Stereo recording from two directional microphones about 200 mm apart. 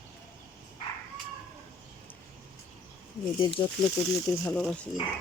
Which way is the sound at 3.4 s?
25° left (ahead or behind).